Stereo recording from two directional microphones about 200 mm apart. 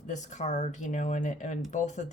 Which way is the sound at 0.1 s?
35° left (ahead or behind).